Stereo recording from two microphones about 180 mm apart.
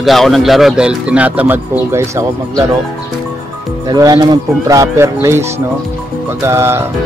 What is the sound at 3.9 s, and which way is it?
Speech, 20° right (ahead or behind).